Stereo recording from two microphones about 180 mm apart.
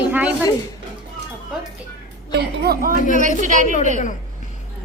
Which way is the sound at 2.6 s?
60° right (ahead or behind).